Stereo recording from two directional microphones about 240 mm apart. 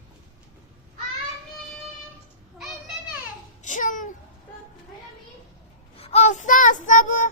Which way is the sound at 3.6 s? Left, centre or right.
Left.